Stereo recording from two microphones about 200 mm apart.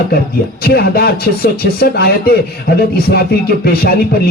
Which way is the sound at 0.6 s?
50° left (ahead or behind).